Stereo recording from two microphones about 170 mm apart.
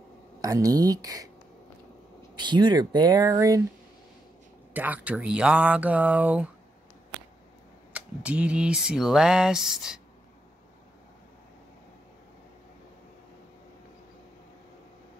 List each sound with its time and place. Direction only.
0.4 s speech: 20° right (ahead or behind)
2.3 s speech: 25° right (ahead or behind)
4.7 s speech: 10° right (ahead or behind)
7.9 s speech: 5° right (ahead or behind)